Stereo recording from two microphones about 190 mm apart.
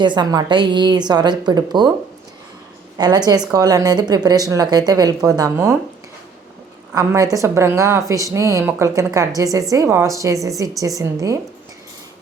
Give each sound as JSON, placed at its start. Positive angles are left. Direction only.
{"t": 0.0, "sound": "a woman's voice", "side_deg": -25}
{"t": 3.0, "sound": "a woman's voice", "side_deg": -20}
{"t": 6.9, "sound": "speech", "side_deg": -20}